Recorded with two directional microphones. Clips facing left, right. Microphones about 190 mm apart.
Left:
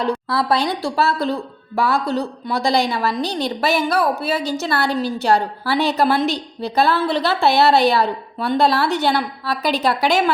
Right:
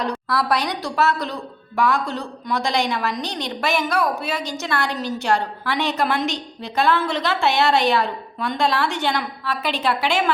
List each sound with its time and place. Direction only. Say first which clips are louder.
0.0 s a woman's voice: left 3 dB; 25° left (ahead or behind)